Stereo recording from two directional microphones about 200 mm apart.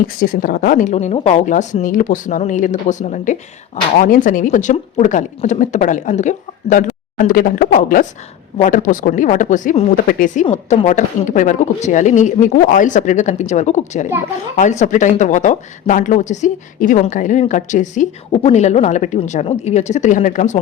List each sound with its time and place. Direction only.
0.2 s speech: 45° left (ahead or behind)